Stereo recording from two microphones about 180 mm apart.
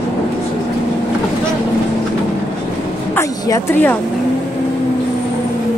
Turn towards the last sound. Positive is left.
turn(degrees=10)  # may be behind; listen again after turning